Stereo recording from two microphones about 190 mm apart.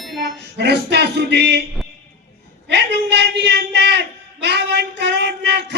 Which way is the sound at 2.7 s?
65° right (ahead or behind).